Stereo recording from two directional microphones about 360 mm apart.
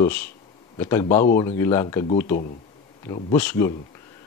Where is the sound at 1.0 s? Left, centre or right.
Left.